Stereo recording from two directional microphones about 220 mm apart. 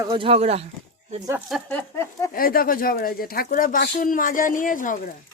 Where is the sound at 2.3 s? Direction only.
40° left (ahead or behind).